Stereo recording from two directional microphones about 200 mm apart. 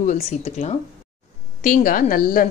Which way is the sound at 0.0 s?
35° left (ahead or behind).